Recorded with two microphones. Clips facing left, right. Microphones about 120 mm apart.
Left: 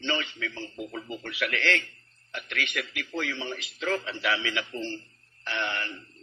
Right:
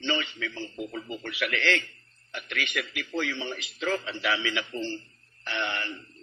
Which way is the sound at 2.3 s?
20° right (ahead or behind).